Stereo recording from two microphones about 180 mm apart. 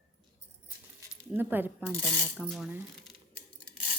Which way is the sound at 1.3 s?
10° right (ahead or behind).